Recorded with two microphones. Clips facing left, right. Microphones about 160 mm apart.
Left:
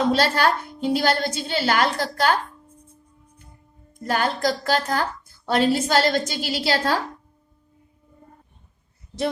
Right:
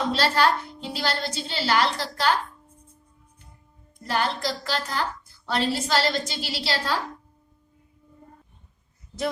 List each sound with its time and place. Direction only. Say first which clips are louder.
0.1 s a woman's voice: left 2 dB; 50° left (ahead or behind)
4.0 s a woman's voice: left 4 dB; 50° left (ahead or behind)